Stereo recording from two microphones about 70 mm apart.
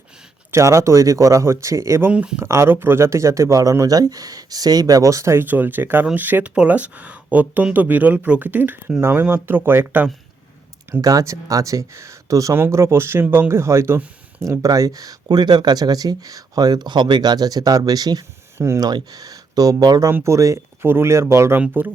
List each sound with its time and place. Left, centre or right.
0.5 s speech: right
2.1 s speech: centre
2.4 s speech: right
5.5 s speech: right
11.0 s speech: right
12.7 s speech: right
14.4 s speech: right
18.5 s speech: right
18.8 s speech: right
20.1 s speech: right
20.8 s speech: right